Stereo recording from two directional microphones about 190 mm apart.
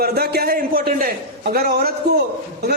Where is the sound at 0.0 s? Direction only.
55° right (ahead or behind).